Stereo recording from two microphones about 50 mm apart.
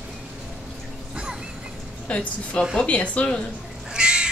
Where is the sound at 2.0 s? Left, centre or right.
Left.